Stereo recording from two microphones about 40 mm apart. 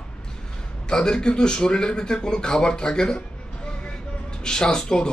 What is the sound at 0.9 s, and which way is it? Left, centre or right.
Speech, centre.